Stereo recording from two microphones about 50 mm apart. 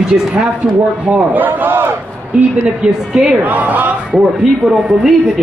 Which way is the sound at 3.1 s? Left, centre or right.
Centre.